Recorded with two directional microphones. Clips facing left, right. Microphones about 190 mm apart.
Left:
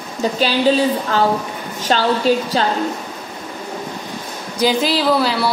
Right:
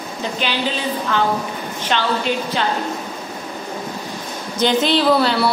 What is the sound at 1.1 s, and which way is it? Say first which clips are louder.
A woman's voice: left 2 dB; 40° left (ahead or behind).